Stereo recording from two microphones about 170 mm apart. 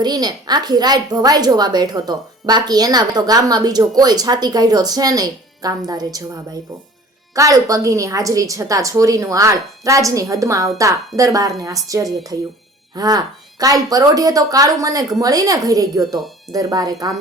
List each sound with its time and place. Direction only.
0.0 s a woman's voice: 25° right (ahead or behind)